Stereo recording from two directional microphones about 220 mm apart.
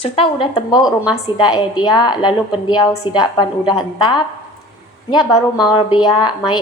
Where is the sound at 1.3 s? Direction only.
20° left (ahead or behind).